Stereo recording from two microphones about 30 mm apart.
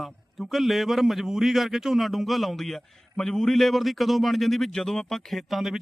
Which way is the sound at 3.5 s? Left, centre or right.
Centre.